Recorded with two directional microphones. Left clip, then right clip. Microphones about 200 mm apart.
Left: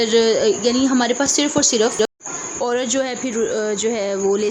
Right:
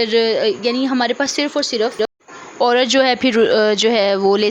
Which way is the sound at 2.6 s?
35° right (ahead or behind).